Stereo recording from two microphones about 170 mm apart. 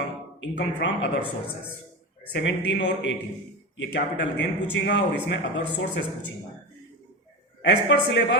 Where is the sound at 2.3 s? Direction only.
90° left.